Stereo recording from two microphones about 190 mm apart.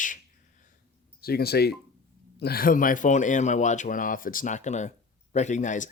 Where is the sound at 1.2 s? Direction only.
55° left (ahead or behind).